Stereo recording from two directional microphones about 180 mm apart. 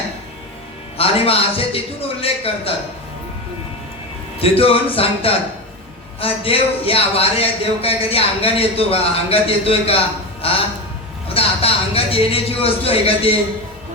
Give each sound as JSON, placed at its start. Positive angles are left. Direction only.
{"t": 0.9, "sound": "speech", "side_deg": 30}
{"t": 4.4, "sound": "speech", "side_deg": 30}